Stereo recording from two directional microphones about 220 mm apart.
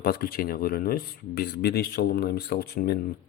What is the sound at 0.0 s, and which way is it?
Speech, 40° left (ahead or behind).